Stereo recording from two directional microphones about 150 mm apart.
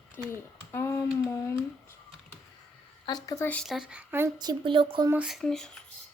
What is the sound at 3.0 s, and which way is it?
Speech, 25° left (ahead or behind).